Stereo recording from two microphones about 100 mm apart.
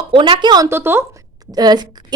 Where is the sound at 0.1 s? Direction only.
55° right (ahead or behind).